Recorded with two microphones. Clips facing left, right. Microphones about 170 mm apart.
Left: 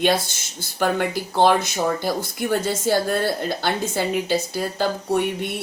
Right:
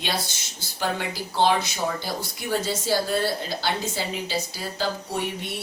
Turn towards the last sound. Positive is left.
turn(degrees=55)  # may be behind; listen again after turning